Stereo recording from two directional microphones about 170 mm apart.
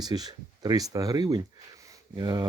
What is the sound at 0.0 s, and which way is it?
Speech, 25° right (ahead or behind).